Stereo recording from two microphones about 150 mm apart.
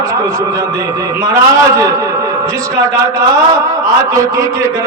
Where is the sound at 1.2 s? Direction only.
20° right (ahead or behind).